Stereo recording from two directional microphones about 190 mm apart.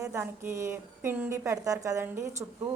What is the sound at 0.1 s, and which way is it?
A woman's voice, 15° right (ahead or behind).